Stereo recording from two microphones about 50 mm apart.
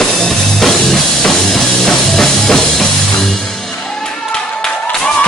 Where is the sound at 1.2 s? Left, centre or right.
Centre.